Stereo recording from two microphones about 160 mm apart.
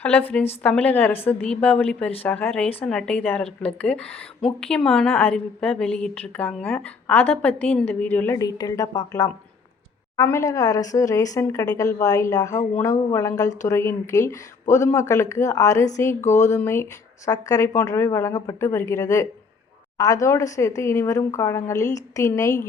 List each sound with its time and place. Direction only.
0.0 s a woman's voice: 10° left (ahead or behind)
8.4 s a woman's voice: 25° left (ahead or behind)